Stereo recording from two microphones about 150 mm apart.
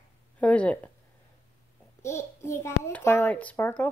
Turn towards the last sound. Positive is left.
turn(degrees=15)  # may be behind; listen again after turning